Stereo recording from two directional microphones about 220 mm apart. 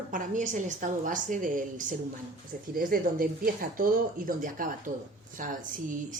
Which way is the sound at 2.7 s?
40° right (ahead or behind).